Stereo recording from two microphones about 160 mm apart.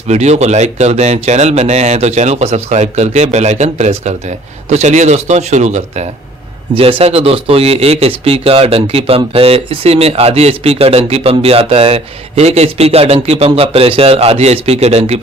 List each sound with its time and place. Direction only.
0.1 s speech: 45° right (ahead or behind)